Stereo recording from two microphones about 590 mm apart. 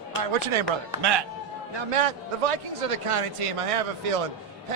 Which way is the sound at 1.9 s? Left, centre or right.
Right.